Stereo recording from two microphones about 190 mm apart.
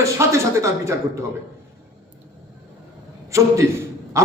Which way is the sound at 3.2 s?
15° right (ahead or behind).